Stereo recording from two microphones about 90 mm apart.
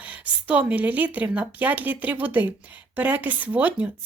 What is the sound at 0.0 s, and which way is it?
A woman's voice, 15° right (ahead or behind).